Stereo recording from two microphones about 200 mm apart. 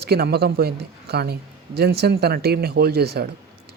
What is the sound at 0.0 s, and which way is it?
A man's voice, 50° right (ahead or behind).